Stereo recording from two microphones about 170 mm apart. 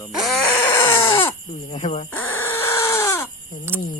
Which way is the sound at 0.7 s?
25° left (ahead or behind).